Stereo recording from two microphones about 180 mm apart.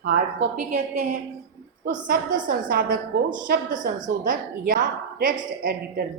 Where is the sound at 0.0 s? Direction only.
50° right (ahead or behind).